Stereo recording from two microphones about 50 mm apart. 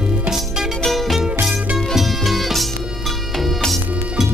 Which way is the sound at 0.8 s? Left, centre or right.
Centre.